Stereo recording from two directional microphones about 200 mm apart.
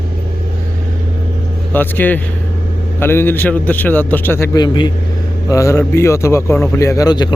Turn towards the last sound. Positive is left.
turn(degrees=20)  # may be behind; listen again after turning